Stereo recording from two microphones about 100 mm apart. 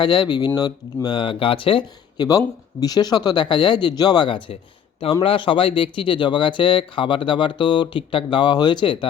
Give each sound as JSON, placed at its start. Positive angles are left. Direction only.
{"t": 0.0, "sound": "speech", "side_deg": 50}
{"t": 2.1, "sound": "speech", "side_deg": 40}